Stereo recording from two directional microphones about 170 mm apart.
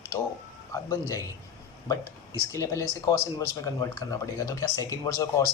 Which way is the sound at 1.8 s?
20° left (ahead or behind).